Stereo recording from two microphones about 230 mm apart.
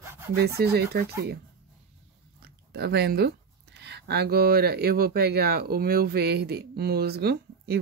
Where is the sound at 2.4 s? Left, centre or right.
Right.